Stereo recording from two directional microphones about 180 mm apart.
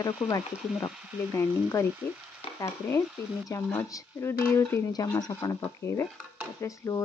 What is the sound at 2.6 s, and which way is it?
Speech, 15° left (ahead or behind).